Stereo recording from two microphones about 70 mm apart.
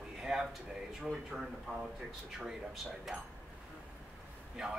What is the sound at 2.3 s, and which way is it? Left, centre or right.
Speech, centre.